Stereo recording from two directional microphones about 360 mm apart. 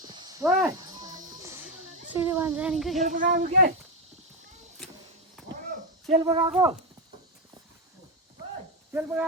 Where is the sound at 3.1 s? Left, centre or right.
Right.